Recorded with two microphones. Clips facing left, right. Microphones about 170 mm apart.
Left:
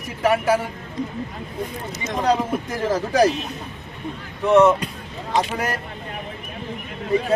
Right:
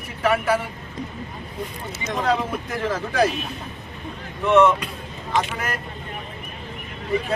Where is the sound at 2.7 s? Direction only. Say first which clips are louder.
Left 4 dB; 40° left (ahead or behind).